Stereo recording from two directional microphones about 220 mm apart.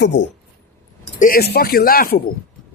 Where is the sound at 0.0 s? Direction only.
55° left (ahead or behind).